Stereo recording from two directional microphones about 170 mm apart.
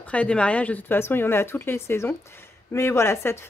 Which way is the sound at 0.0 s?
5° left (ahead or behind).